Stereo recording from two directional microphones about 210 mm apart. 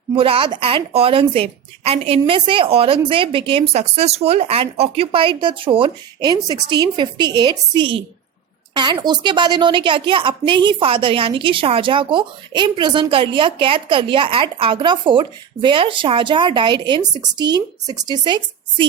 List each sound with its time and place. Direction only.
0.2 s a woman's voice: 25° right (ahead or behind)